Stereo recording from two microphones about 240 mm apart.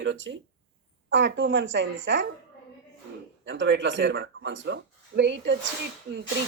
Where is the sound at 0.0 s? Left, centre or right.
Right.